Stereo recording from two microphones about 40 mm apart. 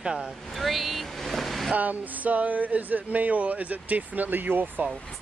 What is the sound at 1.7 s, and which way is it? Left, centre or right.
Speech, right.